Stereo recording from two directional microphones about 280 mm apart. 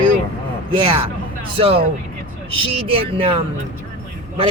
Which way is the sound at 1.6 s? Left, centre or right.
Centre.